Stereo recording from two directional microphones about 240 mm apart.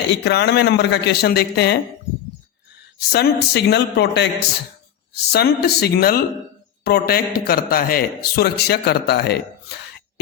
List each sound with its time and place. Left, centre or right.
0.1 s a man's voice: left
3.1 s a man's voice: left